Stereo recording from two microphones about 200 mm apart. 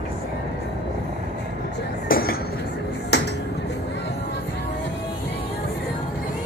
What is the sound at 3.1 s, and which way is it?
Music, 55° left (ahead or behind).